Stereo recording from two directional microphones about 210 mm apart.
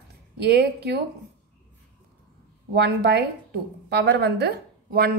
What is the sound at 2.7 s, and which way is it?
A woman's voice, 50° right (ahead or behind).